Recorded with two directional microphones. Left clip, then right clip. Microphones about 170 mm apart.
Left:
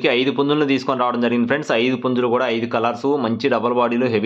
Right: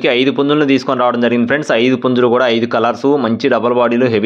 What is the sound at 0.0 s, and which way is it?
Speech, 25° right (ahead or behind).